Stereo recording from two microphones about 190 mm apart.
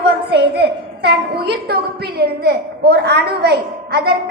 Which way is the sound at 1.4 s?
60° right (ahead or behind).